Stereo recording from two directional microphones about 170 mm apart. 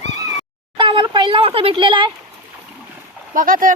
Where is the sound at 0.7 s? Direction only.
30° right (ahead or behind).